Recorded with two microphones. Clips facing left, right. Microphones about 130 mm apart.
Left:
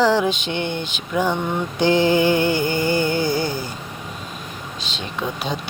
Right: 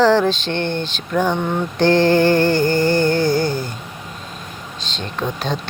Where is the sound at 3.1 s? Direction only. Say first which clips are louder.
Right 4 dB; 50° right (ahead or behind).